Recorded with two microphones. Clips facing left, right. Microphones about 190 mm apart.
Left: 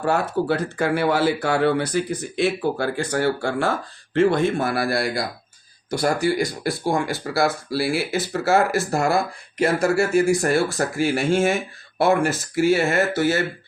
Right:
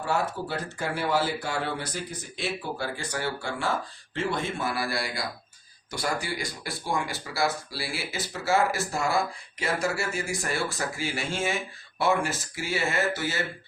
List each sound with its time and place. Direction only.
0.0 s speech: 60° left (ahead or behind)
5.9 s speech: 45° left (ahead or behind); by 9.1 s 65° left (ahead or behind)
9.6 s speech: 55° left (ahead or behind)